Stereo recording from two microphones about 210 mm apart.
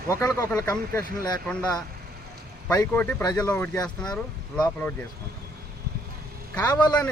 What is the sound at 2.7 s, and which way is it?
Speech, 15° left (ahead or behind).